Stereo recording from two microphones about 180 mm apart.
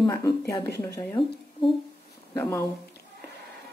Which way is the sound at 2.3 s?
15° left (ahead or behind).